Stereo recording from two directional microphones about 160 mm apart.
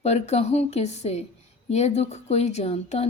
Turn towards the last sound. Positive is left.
turn(degrees=40)  # may be behind; listen again after turning